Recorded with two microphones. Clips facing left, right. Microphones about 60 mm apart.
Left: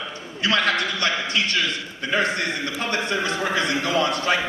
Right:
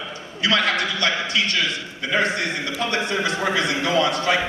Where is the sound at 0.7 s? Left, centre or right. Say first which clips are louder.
Right 1 dB; left.